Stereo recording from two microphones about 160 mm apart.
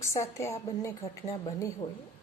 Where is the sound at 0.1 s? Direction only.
20° left (ahead or behind).